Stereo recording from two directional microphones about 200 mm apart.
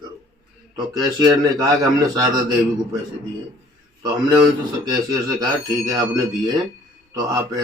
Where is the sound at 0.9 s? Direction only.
20° right (ahead or behind).